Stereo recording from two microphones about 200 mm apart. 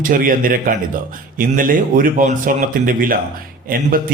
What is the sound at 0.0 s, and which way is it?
A man's voice, 45° right (ahead or behind).